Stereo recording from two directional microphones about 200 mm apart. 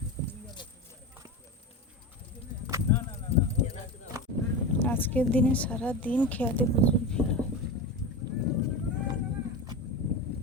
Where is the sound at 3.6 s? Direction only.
40° left (ahead or behind).